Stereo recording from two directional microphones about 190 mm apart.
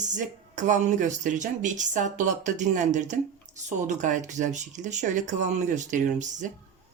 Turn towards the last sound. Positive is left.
turn(degrees=-40)  # may be behind; listen again after turning